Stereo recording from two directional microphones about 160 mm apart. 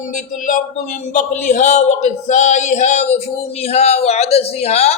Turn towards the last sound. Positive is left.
turn(degrees=40)  # may be behind; listen again after turning